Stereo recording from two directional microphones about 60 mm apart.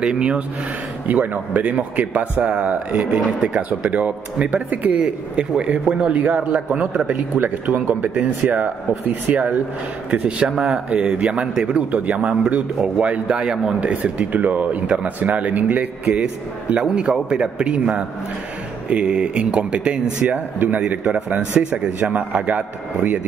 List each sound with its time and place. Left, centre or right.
0.0 s speech: centre
1.0 s speech: right
6.7 s speech: centre
7.2 s speech: right
10.6 s speech: right